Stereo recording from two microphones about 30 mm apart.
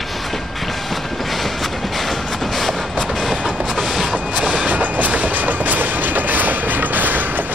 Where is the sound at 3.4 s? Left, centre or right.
Right.